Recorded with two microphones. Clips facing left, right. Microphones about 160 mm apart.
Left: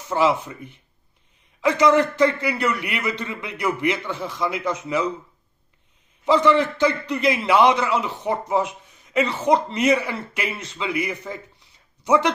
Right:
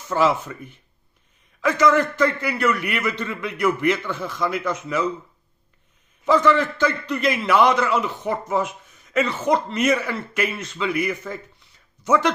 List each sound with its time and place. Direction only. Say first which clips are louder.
0.1 s a man's voice: even; 20° left (ahead or behind)
6.2 s a man's voice: even; 25° left (ahead or behind)